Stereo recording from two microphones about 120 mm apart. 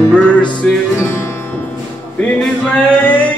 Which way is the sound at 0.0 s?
10° left (ahead or behind).